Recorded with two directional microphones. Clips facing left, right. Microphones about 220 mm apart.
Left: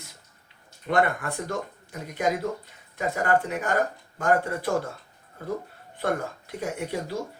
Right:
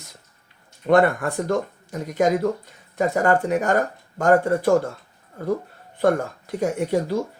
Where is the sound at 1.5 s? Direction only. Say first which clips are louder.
Right 8 dB; 45° right (ahead or behind).